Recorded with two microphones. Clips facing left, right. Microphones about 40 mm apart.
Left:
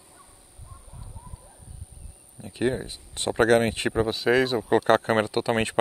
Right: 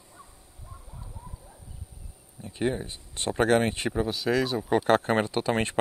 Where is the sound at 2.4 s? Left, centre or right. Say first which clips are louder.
Left 2 dB; centre.